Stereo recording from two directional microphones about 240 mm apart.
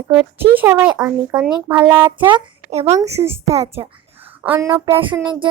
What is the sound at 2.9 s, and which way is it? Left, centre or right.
Speech, centre.